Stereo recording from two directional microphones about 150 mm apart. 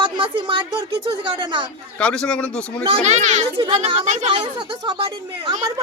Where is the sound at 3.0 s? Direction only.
50° right (ahead or behind).